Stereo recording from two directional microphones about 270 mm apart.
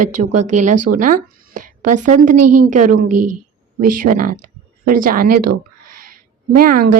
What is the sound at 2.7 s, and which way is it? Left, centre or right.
A woman's voice, right.